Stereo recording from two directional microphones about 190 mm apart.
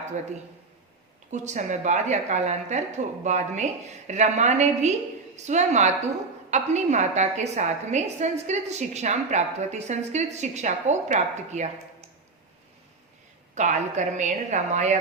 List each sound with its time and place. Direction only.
1.3 s a woman's voice: 40° right (ahead or behind)
13.6 s a woman's voice: 40° right (ahead or behind)